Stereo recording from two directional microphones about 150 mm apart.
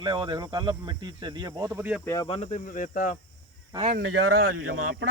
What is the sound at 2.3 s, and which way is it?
Speech, 50° left (ahead or behind).